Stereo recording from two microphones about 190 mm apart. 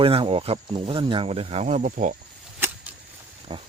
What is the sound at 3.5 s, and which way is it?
Speech, 25° right (ahead or behind).